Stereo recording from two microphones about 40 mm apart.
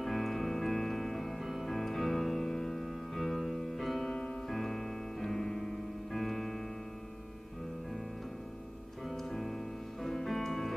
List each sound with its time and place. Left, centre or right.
0.0 s music: centre
4.1 s music: centre
4.5 s music: centre
9.0 s music: centre